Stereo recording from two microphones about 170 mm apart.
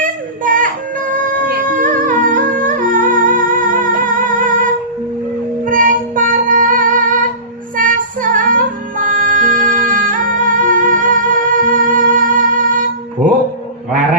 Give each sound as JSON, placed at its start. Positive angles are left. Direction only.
{"t": 0.0, "sound": "music", "side_deg": -50}
{"t": 1.4, "sound": "a sound", "side_deg": -60}
{"t": 5.6, "sound": "child singing", "side_deg": -55}
{"t": 7.8, "sound": "music", "side_deg": -50}